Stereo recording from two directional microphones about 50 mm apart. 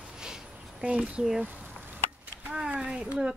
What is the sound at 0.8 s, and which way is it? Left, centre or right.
Speech, right.